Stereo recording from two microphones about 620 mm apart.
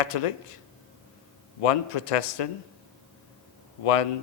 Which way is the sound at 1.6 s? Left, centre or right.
Left.